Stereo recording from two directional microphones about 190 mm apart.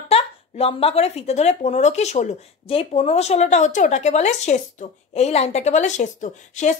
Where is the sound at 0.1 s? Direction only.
30° left (ahead or behind).